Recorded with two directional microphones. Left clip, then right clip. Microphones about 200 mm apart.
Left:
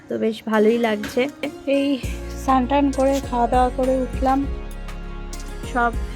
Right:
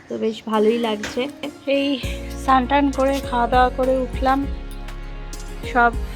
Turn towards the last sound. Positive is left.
turn(degrees=-10)  # may be behind; listen again after turning